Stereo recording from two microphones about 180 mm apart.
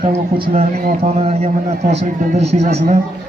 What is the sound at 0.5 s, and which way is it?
A man's voice, 40° right (ahead or behind).